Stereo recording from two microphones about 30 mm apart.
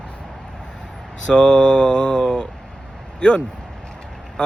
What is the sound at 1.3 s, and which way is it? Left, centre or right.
Speech, left.